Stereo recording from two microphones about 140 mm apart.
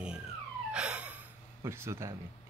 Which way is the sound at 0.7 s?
10° right (ahead or behind).